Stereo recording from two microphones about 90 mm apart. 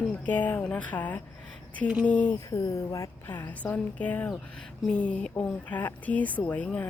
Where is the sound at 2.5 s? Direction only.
35° left (ahead or behind).